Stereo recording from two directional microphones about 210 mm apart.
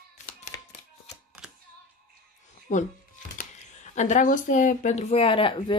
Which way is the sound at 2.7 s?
35° left (ahead or behind).